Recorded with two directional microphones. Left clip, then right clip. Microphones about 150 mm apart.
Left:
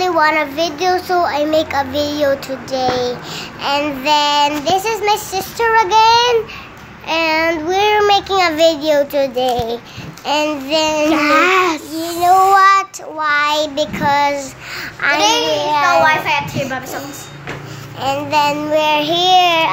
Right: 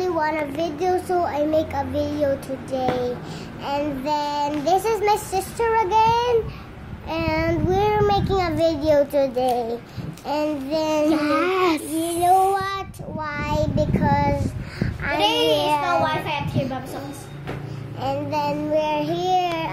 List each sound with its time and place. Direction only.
0.2 s child singing: 10° left (ahead or behind)
0.6 s child singing: centre (ahead or behind)
1.5 s child singing: 10° left (ahead or behind)
4.6 s child singing: 5° right (ahead or behind); by 15.2 s 15° left (ahead or behind)
15.7 s child singing: centre (ahead or behind)
18.0 s child singing: 5° left (ahead or behind)
18.4 s child singing: 15° left (ahead or behind)
19.0 s child singing: 5° left (ahead or behind)